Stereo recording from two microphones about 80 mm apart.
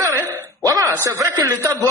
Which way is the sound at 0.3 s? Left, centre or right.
Right.